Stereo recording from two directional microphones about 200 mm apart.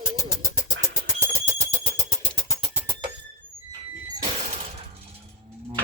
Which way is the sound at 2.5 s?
10° right (ahead or behind).